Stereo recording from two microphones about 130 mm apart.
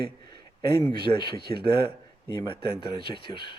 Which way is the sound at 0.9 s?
35° left (ahead or behind).